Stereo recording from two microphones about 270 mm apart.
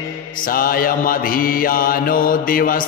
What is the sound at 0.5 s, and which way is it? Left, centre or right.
Mantra, left.